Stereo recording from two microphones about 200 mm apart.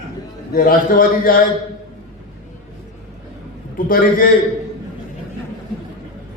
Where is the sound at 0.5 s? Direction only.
45° left (ahead or behind).